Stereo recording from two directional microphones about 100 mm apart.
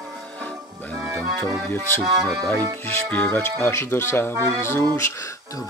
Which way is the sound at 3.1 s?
20° left (ahead or behind).